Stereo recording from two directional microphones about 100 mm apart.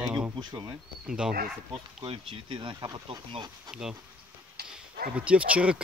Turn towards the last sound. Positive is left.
turn(degrees=-10)  # may be behind; listen again after turning